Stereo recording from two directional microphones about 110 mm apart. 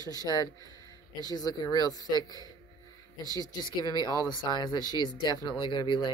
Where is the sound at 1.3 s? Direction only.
35° left (ahead or behind).